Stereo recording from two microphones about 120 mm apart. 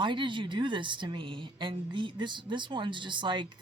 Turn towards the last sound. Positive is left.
turn(degrees=-40)  # may be behind; listen again after turning